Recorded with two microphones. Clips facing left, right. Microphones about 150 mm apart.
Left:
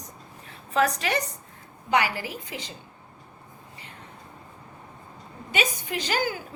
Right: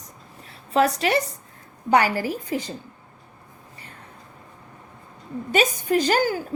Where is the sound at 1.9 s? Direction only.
45° right (ahead or behind).